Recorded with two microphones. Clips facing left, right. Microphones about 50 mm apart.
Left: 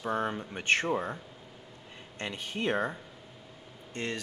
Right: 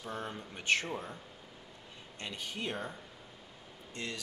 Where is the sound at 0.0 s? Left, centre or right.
Left.